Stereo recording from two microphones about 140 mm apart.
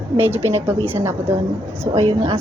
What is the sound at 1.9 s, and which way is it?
Speech, 35° right (ahead or behind).